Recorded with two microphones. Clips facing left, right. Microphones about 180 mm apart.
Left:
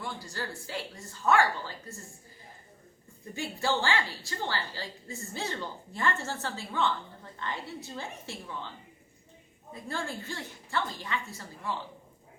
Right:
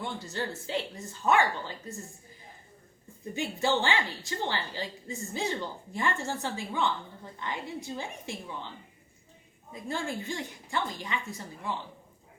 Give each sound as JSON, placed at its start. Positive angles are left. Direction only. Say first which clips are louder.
{"t": 0.0, "sound": "speech", "louder": "right 3 dB", "side_deg": -25}
{"t": 3.3, "sound": "a woman's voice", "louder": "right 2 dB", "side_deg": -20}
{"t": 9.9, "sound": "a woman's voice", "louder": "right 3 dB", "side_deg": -15}